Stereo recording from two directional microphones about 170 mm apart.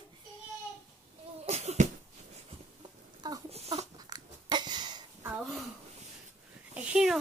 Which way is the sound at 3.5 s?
35° right (ahead or behind).